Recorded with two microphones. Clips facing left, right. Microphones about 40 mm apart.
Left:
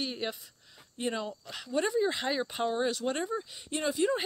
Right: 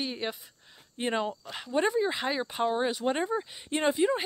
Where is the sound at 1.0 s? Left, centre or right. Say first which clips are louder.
Right 4 dB; right.